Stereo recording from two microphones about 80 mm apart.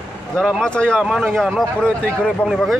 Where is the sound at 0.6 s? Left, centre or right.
Centre.